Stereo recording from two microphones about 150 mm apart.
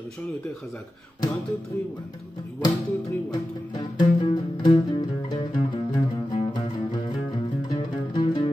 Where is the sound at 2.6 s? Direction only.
25° left (ahead or behind).